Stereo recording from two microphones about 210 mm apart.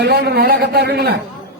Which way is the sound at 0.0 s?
50° right (ahead or behind).